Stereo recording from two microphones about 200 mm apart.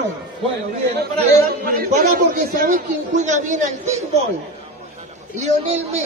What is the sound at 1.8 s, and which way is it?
A man's voice, 45° right (ahead or behind).